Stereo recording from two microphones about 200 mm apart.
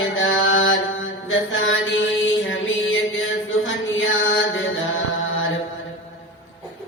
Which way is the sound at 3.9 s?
75° left (ahead or behind).